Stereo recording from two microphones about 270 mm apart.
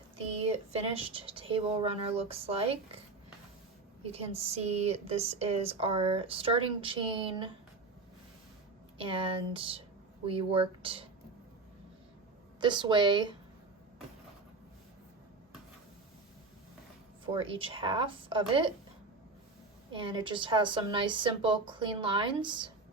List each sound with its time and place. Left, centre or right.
0.2 s a woman's voice: right
4.0 s a woman's voice: right
9.0 s a woman's voice: centre
12.5 s a woman's voice: centre
17.3 s a woman's voice: centre
19.9 s a woman's voice: centre